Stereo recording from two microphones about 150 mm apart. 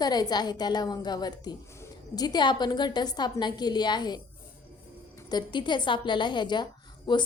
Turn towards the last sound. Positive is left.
turn(degrees=30)  # may be behind; listen again after turning